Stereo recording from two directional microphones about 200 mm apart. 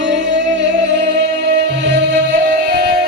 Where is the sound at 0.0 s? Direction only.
60° right (ahead or behind).